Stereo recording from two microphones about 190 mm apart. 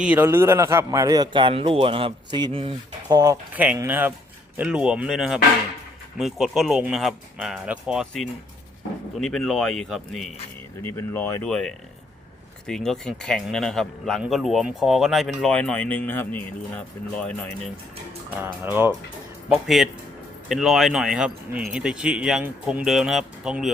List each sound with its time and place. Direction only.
0.0 s a man's voice: 10° right (ahead or behind)
3.5 s speech: 10° right (ahead or behind)
9.2 s speech: centre (ahead or behind)
10.8 s speech: 10° left (ahead or behind)
18.3 s speech: 10° right (ahead or behind)
19.6 s speech: centre (ahead or behind)